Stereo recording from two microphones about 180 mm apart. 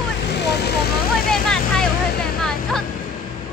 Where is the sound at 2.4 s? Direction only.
5° left (ahead or behind).